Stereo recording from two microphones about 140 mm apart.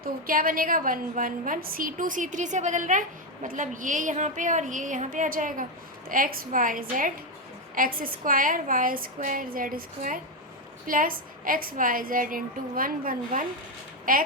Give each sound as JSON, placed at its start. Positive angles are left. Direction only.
{"t": 0.0, "sound": "a woman's voice", "side_deg": -90}
{"t": 7.8, "sound": "a woman's voice", "side_deg": -90}